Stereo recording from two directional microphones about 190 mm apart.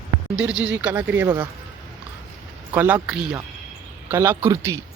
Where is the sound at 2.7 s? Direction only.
10° right (ahead or behind).